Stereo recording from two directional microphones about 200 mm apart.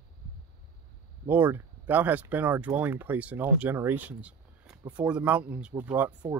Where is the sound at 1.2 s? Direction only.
10° right (ahead or behind).